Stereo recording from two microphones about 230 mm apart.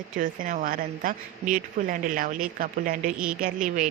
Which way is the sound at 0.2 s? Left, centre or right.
Right.